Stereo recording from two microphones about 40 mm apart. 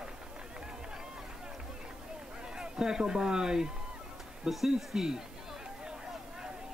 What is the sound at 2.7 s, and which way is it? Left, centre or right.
Speech, centre.